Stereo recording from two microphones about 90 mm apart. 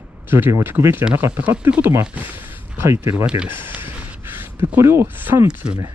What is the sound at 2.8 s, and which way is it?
Speech, 30° right (ahead or behind).